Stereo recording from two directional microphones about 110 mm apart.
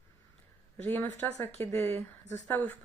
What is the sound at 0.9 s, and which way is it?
Speech, 15° left (ahead or behind).